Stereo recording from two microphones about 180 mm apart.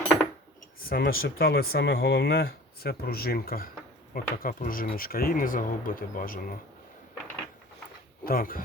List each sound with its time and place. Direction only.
0.8 s speech: 55° left (ahead or behind)
8.2 s speech: 55° left (ahead or behind)